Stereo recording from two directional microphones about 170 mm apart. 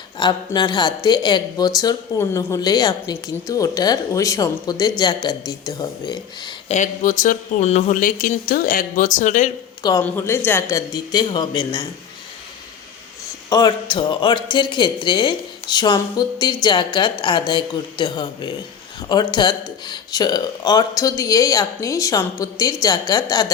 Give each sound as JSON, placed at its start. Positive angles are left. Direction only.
{"t": 0.2, "sound": "speech", "side_deg": 25}
{"t": 6.7, "sound": "speech", "side_deg": 45}
{"t": 10.0, "sound": "speech", "side_deg": 15}
{"t": 13.5, "sound": "speech", "side_deg": 25}